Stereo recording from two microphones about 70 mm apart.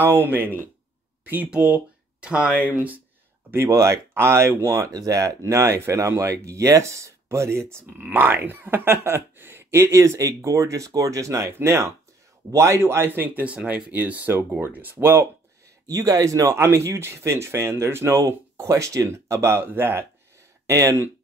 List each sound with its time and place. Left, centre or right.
0.0 s speech: right
3.5 s speech: right
4.9 s speech: right
15.9 s speech: right
16.5 s speech: right
20.6 s speech: right